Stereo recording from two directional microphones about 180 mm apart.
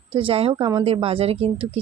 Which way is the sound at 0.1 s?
30° right (ahead or behind).